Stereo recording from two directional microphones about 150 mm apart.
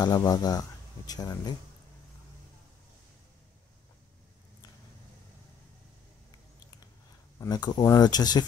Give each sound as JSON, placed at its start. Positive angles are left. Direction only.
{"t": 0.0, "sound": "speech", "side_deg": 25}
{"t": 7.3, "sound": "speech", "side_deg": 25}